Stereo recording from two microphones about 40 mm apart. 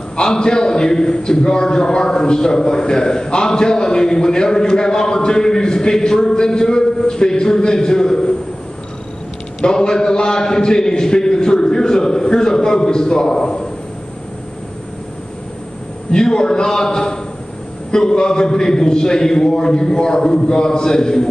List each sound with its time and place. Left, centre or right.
0.1 s a man's voice: centre
9.6 s a man's voice: centre
16.1 s a man's voice: centre